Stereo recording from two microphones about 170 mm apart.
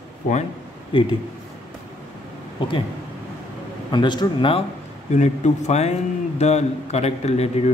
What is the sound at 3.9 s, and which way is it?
Speech, 25° left (ahead or behind).